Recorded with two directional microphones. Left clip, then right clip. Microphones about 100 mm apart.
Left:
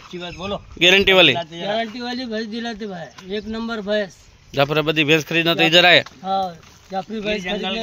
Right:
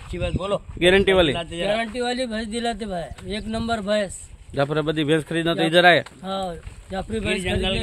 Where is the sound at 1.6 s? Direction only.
50° right (ahead or behind).